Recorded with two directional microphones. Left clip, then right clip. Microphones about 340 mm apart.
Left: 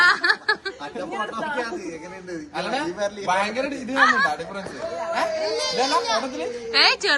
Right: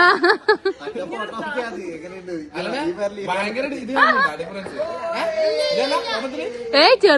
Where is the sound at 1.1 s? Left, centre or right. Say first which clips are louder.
Left 2 dB; centre.